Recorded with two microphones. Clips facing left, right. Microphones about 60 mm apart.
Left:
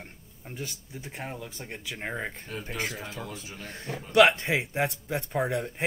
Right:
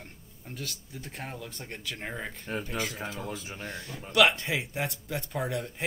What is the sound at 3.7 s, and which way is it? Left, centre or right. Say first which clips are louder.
Speech: left 6 dB; left.